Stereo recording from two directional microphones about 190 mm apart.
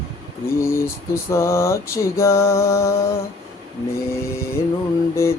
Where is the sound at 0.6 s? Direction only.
15° left (ahead or behind).